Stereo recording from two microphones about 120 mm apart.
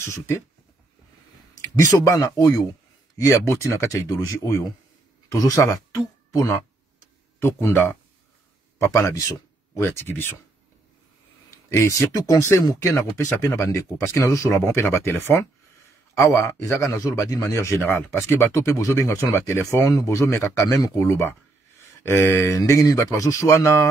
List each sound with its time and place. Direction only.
0.0 s a man's voice: 20° left (ahead or behind)
1.6 s a man's voice: 25° left (ahead or behind)
7.6 s a man's voice: 20° left (ahead or behind)
11.7 s a man's voice: 25° left (ahead or behind)